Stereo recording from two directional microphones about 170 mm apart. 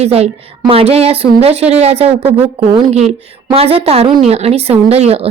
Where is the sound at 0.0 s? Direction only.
40° right (ahead or behind).